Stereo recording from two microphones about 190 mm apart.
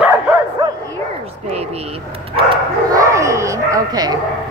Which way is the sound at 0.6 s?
20° right (ahead or behind).